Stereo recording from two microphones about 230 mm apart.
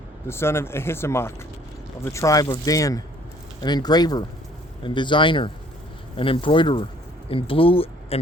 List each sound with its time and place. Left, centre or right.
0.3 s speech: centre